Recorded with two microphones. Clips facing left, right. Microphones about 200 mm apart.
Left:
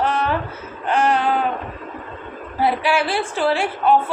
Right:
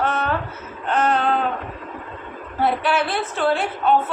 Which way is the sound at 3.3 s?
5° left (ahead or behind).